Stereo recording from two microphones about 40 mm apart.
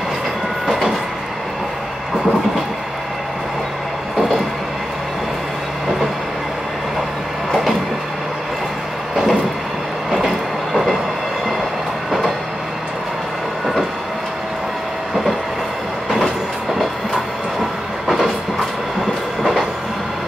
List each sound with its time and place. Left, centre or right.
0.7 s train: centre
9.1 s vehicle: centre
10.1 s train: centre
18.0 s train: centre